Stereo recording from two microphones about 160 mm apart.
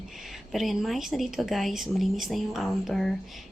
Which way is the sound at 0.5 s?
Centre (ahead or behind).